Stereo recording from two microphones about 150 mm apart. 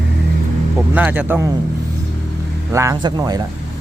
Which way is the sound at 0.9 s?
10° right (ahead or behind).